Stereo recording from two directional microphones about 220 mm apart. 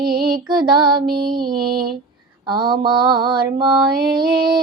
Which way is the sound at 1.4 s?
45° right (ahead or behind).